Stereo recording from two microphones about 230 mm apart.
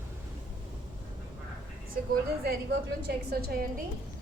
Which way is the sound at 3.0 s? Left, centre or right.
Right.